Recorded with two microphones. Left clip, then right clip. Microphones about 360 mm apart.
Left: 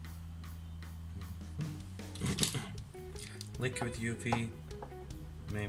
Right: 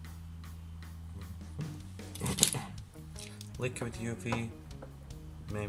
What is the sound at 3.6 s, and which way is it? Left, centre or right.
Speech, centre.